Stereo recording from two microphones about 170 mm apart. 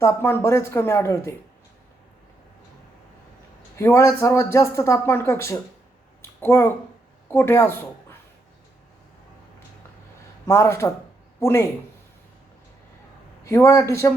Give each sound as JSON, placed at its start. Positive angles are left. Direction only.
{"t": 0.0, "sound": "speech", "side_deg": 15}
{"t": 3.8, "sound": "speech", "side_deg": 15}
{"t": 10.4, "sound": "a man's voice", "side_deg": 15}
{"t": 13.4, "sound": "speech", "side_deg": 15}